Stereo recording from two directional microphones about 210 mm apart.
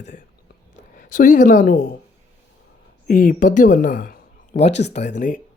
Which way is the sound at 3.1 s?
40° left (ahead or behind).